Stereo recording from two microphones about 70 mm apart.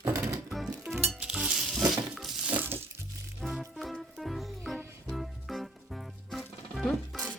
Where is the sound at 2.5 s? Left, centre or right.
Right.